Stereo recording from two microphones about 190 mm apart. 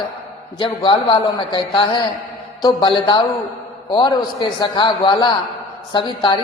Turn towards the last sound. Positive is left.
turn(degrees=25)  # may be behind; listen again after turning